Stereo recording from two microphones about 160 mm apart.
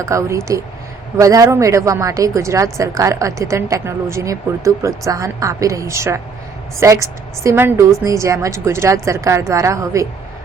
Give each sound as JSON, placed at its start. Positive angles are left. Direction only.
{"t": 0.0, "sound": "a woman's voice", "side_deg": -20}